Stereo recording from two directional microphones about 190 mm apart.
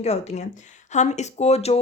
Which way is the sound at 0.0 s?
35° left (ahead or behind).